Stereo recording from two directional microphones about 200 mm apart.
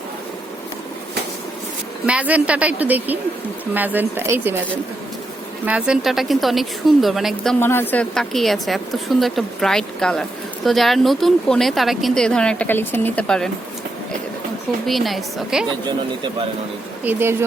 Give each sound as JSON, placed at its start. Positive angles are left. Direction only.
{"t": 2.0, "sound": "a woman's voice", "side_deg": -5}
{"t": 5.6, "sound": "a woman's voice", "side_deg": -5}
{"t": 7.6, "sound": "a woman's voice", "side_deg": 10}
{"t": 14.8, "sound": "a woman's voice", "side_deg": 0}
{"t": 15.9, "sound": "speech", "side_deg": -25}
{"t": 17.0, "sound": "a woman's voice", "side_deg": -10}